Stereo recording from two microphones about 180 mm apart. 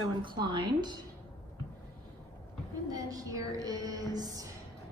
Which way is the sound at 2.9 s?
20° right (ahead or behind).